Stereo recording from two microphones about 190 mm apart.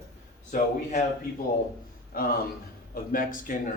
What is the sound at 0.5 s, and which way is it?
Speech, 40° left (ahead or behind).